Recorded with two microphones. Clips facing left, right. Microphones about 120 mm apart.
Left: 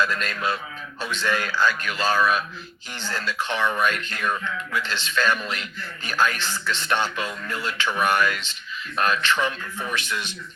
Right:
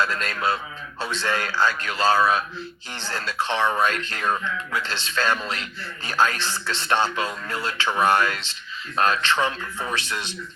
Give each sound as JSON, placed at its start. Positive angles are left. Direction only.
{"t": 0.0, "sound": "speech", "side_deg": -30}